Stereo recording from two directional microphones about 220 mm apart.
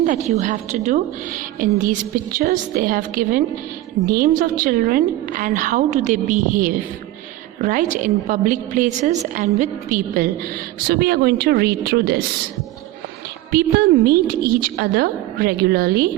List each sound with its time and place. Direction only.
0.0 s a woman's voice: 35° right (ahead or behind)
13.5 s a woman's voice: 45° right (ahead or behind)